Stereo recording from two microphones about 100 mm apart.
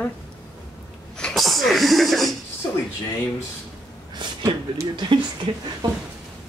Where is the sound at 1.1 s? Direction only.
5° left (ahead or behind).